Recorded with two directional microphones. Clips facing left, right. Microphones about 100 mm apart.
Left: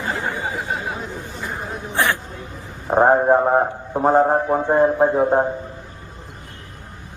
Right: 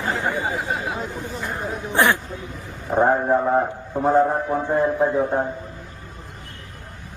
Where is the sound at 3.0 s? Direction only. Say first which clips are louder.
Left 4 dB; 45° left (ahead or behind).